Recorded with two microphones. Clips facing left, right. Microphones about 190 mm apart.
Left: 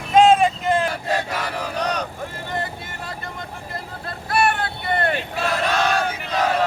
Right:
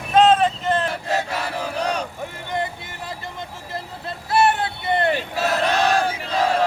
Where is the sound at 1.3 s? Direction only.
25° right (ahead or behind).